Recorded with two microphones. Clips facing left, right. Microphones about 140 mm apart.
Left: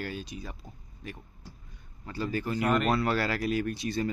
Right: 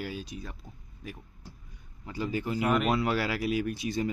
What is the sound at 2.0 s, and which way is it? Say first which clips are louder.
Speech: even; 15° right (ahead or behind).